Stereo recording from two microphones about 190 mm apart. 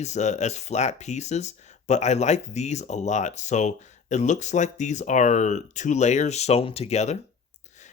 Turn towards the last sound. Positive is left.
turn(degrees=35)  # may be behind; listen again after turning